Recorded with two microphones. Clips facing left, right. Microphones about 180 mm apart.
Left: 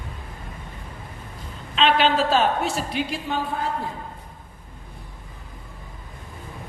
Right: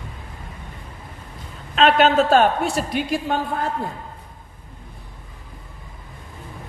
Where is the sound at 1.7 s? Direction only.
45° right (ahead or behind).